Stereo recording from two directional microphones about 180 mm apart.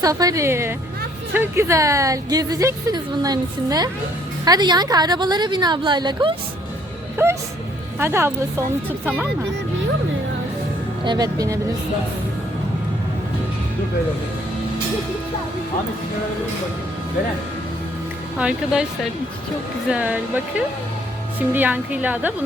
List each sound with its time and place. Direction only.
0.0 s a woman's voice: 20° right (ahead or behind)
7.2 s a woman's voice: 15° right (ahead or behind)
11.0 s a woman's voice: 25° right (ahead or behind)
18.3 s speech: 5° right (ahead or behind)
19.9 s a woman's voice: 10° right (ahead or behind)
21.5 s a woman's voice: 10° right (ahead or behind)